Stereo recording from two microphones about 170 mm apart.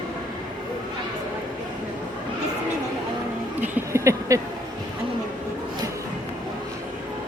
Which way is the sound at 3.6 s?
15° right (ahead or behind).